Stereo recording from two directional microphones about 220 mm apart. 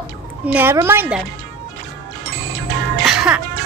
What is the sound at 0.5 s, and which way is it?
Speech, 10° right (ahead or behind).